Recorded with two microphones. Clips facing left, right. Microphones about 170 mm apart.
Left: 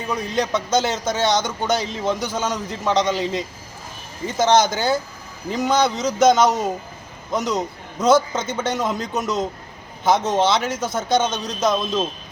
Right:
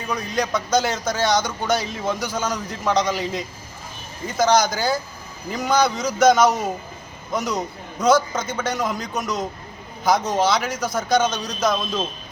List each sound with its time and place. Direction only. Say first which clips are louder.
0.1 s a man's voice: left 1 dB; 25° left (ahead or behind)